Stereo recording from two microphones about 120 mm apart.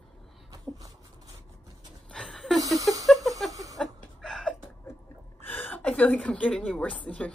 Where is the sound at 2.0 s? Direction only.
5° left (ahead or behind).